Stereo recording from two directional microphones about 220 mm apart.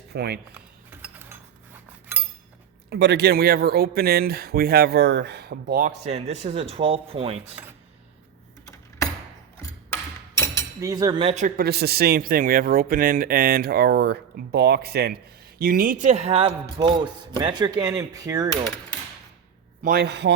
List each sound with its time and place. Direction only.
0.1 s speech: 50° right (ahead or behind)
0.5 s a sound: 10° right (ahead or behind)
2.9 s speech: 50° right (ahead or behind); by 7.3 s 25° right (ahead or behind)
9.9 s a sound: 15° left (ahead or behind)
10.8 s speech: 15° right (ahead or behind)
19.8 s speech: 45° right (ahead or behind)